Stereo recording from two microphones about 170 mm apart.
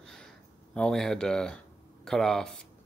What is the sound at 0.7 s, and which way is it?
Speech, 5° left (ahead or behind).